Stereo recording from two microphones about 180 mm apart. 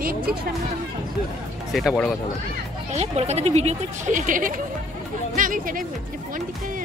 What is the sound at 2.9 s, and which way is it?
Speech, 35° right (ahead or behind).